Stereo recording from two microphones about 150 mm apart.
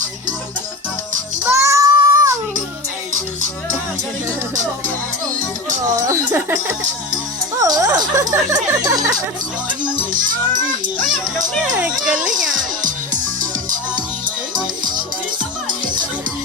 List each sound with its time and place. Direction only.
1.5 s child singing: 20° right (ahead or behind)
6.1 s speech: 20° right (ahead or behind)
10.1 s speech: 65° right (ahead or behind)
11.8 s speech: 5° right (ahead or behind)
12.5 s music: 60° right (ahead or behind)